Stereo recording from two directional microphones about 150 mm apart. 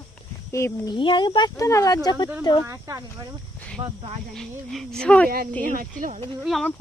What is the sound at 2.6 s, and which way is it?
Speech, 20° right (ahead or behind).